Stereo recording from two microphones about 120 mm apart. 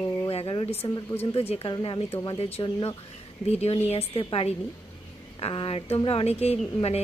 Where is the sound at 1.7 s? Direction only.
45° left (ahead or behind).